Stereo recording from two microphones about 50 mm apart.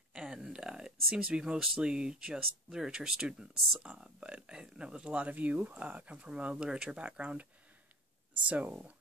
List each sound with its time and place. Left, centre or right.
0.1 s a sound: centre
1.6 s speech: centre
5.1 s speech: right
8.5 s speech: right